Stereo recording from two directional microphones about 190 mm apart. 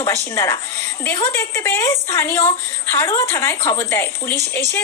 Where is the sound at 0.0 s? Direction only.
15° left (ahead or behind).